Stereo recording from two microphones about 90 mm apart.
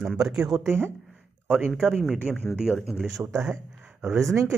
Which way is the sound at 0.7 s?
25° right (ahead or behind).